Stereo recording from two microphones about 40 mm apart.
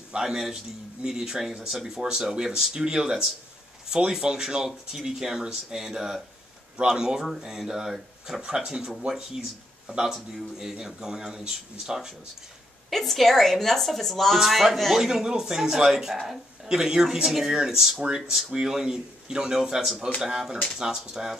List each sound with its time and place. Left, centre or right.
0.2 s speech: centre
12.9 s speech: centre
15.0 s speech: centre